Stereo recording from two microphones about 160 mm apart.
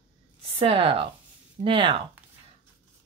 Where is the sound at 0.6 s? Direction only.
35° right (ahead or behind).